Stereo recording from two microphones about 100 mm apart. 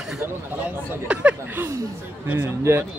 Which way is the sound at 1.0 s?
10° right (ahead or behind).